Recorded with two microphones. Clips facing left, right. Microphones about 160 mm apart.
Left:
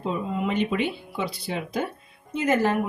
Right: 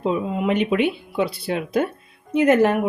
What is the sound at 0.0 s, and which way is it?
Speech, 70° right (ahead or behind).